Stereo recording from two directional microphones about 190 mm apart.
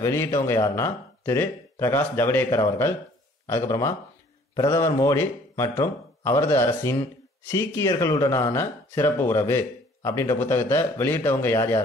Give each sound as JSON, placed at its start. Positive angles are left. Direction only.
{"t": 0.0, "sound": "speech", "side_deg": 15}